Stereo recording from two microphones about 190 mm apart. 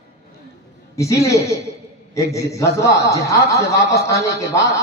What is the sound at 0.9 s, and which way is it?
A man's voice, 15° left (ahead or behind).